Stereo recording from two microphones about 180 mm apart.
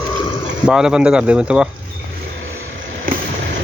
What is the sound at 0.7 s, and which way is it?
Speech, 5° right (ahead or behind).